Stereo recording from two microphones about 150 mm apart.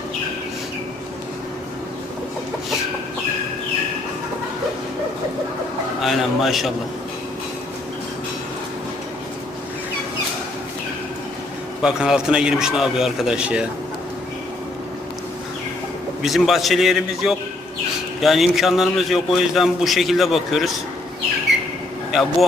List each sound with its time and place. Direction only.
6.0 s a man's voice: centre (ahead or behind)
11.8 s a man's voice: 5° right (ahead or behind)
16.2 s a man's voice: centre (ahead or behind)
22.1 s a man's voice: centre (ahead or behind)